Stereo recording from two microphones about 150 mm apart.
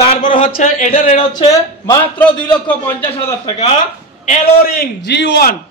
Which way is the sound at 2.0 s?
10° left (ahead or behind).